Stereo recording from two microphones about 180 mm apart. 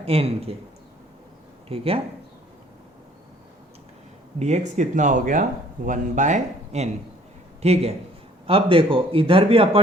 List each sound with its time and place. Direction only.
0.0 s speech: 35° right (ahead or behind)
1.7 s speech: 30° right (ahead or behind)
4.4 s a man's voice: 40° right (ahead or behind)